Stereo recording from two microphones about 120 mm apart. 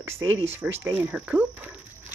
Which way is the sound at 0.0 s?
20° right (ahead or behind).